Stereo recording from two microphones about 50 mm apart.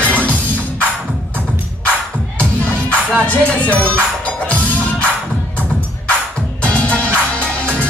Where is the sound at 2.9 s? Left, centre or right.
Left.